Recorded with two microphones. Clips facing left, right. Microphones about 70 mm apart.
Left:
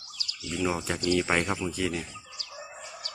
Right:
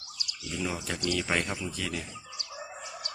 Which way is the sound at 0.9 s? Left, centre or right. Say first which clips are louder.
Left 3 dB; left.